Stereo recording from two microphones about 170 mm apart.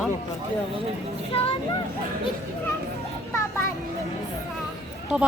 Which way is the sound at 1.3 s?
35° left (ahead or behind).